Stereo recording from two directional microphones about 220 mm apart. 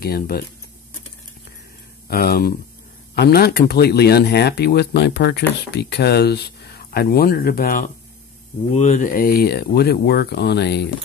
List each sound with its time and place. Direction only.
0.0 s speech: 45° left (ahead or behind)
2.0 s speech: 45° left (ahead or behind)